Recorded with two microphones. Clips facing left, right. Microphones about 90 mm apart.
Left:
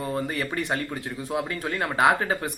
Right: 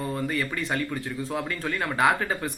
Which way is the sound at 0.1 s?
20° left (ahead or behind).